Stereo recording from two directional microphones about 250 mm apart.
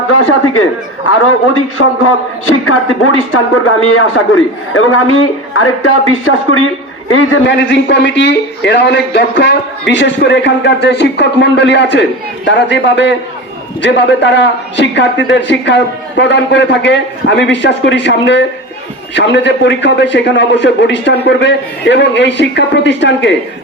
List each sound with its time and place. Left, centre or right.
0.1 s a man's voice: left
1.8 s a man's voice: left